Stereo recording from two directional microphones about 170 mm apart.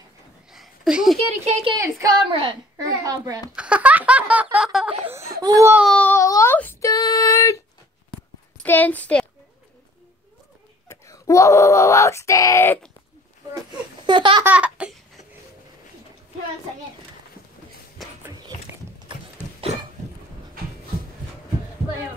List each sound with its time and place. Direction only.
0.5 s a sound: 5° right (ahead or behind)
1.4 s speech: 30° right (ahead or behind)
1.8 s a child's voice: 20° right (ahead or behind)
3.5 s a sound: 5° right (ahead or behind)
5.4 s speech: 20° right (ahead or behind)
5.9 s a sound: 10° left (ahead or behind)
8.6 s a woman's voice: 10° left (ahead or behind)
10.9 s speech: 20° left (ahead or behind)
14.0 s laughter: 30° right (ahead or behind)
14.4 s laughter: 10° right (ahead or behind)
19.6 s cough: 35° right (ahead or behind)